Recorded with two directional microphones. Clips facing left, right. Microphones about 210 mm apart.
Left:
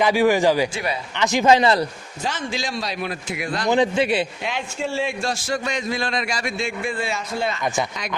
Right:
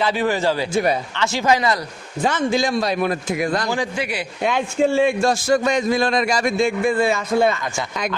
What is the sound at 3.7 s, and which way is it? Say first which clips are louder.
Speech: left 5 dB; 25° left (ahead or behind).